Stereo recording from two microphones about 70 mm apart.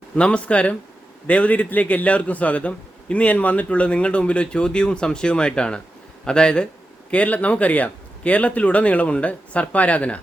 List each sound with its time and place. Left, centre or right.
0.2 s a man's voice: centre